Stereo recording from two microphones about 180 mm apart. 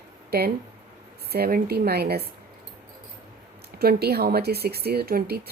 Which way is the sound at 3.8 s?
60° right (ahead or behind).